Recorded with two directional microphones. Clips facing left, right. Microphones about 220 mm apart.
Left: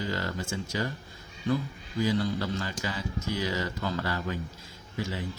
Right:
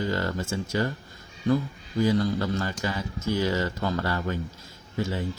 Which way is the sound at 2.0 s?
50° right (ahead or behind).